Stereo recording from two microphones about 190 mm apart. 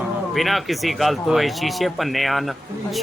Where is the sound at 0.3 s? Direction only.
Centre (ahead or behind).